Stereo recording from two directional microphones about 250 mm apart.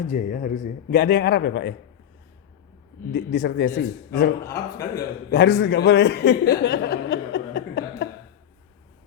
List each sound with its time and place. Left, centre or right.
0.1 s a man's voice: left
3.1 s a man's voice: left
4.4 s a man's voice: centre
4.9 s a man's voice: left